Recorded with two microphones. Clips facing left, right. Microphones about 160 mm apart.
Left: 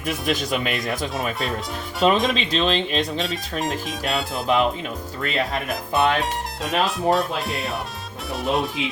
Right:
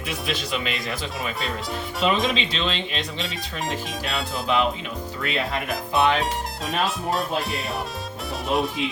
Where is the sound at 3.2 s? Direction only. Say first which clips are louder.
Left 4 dB; centre (ahead or behind).